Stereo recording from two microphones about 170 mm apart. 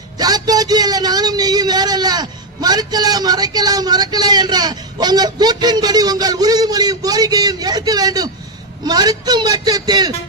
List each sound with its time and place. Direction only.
0.2 s a man's voice: 25° right (ahead or behind)